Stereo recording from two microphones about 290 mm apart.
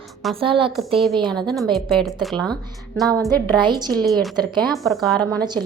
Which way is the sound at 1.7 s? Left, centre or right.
Centre.